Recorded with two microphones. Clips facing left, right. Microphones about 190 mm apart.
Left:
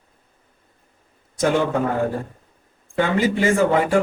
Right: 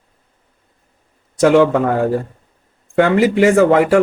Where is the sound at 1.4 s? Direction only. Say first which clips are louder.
Right 8 dB; 80° right.